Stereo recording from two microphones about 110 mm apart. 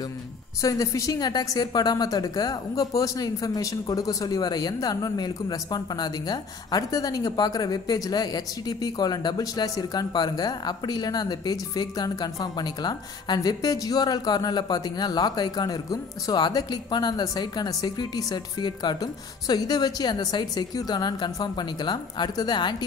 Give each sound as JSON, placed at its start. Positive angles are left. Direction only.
{"t": 0.6, "sound": "a woman's voice", "side_deg": 30}